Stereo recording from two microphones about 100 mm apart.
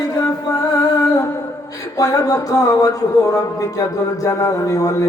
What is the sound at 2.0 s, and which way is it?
A man's voice, 35° left (ahead or behind).